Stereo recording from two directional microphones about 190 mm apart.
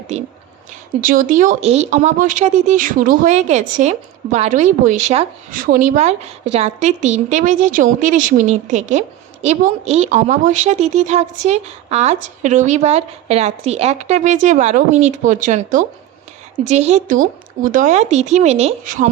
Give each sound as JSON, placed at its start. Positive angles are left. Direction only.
{"t": 0.1, "sound": "a woman's voice", "side_deg": -35}